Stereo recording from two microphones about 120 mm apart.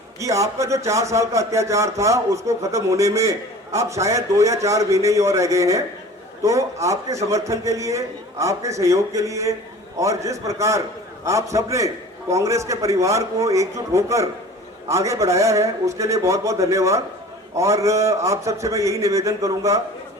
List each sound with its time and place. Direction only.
0.2 s a man's voice: 25° right (ahead or behind)